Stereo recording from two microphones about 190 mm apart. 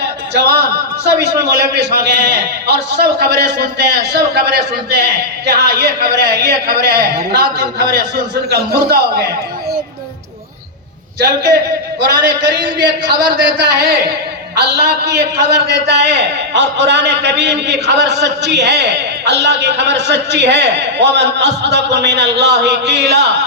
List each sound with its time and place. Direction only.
0.3 s a man's voice: 60° right (ahead or behind)
11.9 s a man's voice: 60° right (ahead or behind)